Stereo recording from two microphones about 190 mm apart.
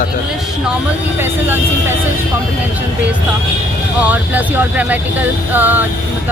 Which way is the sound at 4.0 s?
10° right (ahead or behind).